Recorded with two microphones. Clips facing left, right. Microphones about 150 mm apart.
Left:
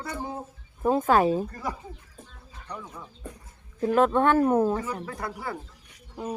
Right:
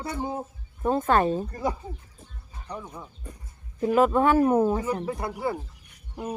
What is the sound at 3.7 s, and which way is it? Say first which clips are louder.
Speech: right 1 dB; 5° right (ahead or behind).